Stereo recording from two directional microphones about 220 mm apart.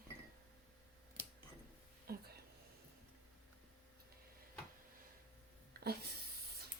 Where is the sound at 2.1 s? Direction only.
45° right (ahead or behind).